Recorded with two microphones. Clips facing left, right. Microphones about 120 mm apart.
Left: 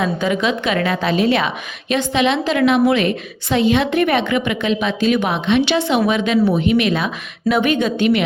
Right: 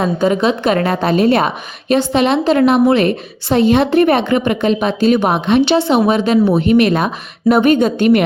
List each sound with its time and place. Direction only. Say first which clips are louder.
0.0 s a woman's voice: right 4 dB; 40° right (ahead or behind)